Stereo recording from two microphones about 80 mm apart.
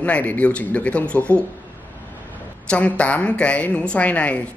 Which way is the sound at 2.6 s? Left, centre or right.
Centre.